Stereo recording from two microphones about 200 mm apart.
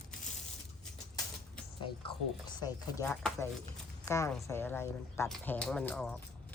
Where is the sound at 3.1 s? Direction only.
5° left (ahead or behind).